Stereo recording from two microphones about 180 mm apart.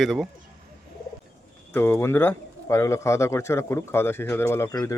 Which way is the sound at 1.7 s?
10° left (ahead or behind).